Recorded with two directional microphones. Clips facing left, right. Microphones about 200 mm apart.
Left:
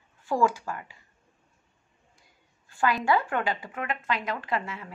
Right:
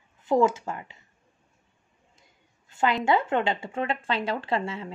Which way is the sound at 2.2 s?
20° right (ahead or behind).